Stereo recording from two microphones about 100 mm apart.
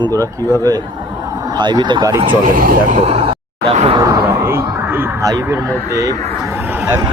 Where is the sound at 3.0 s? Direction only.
75° right (ahead or behind).